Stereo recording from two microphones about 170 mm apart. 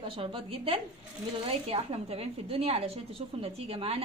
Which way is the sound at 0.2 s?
35° right (ahead or behind).